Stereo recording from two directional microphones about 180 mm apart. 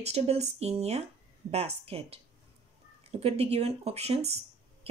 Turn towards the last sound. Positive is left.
turn(degrees=-35)  # may be behind; listen again after turning